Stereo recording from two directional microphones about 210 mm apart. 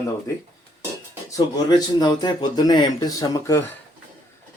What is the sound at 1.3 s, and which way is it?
Speech, 20° left (ahead or behind).